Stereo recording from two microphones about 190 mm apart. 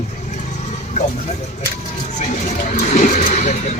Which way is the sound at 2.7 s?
40° left (ahead or behind).